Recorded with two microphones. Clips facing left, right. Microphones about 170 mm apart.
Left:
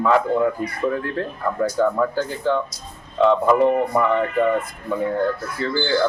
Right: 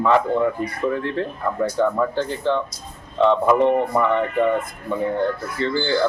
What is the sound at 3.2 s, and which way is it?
Speech, 5° left (ahead or behind).